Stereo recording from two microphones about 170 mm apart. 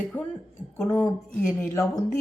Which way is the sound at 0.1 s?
10° left (ahead or behind).